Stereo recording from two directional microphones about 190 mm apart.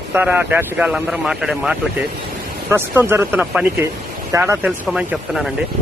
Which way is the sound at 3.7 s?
15° right (ahead or behind).